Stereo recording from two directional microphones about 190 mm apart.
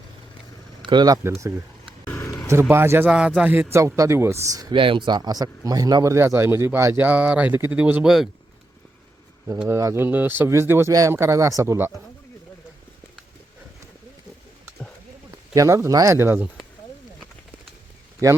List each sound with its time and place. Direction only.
0.8 s speech: 25° right (ahead or behind)
2.0 s a sound: 15° left (ahead or behind)
2.5 s a man's voice: 15° right (ahead or behind)
9.6 s a man's voice: 15° right (ahead or behind)
15.3 s speech: 15° right (ahead or behind)
18.2 s a man's voice: 15° right (ahead or behind)